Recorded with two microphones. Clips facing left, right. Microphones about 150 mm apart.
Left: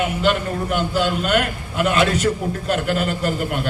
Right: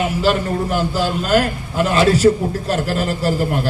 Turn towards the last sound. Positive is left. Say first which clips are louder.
# right 4 dB
turn(degrees=-30)  # may be behind; listen again after turning